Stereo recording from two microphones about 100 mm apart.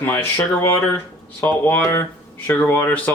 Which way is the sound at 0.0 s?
20° left (ahead or behind).